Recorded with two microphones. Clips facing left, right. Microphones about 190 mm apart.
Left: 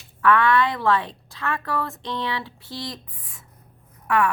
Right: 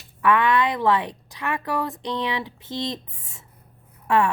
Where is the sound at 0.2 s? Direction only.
15° right (ahead or behind).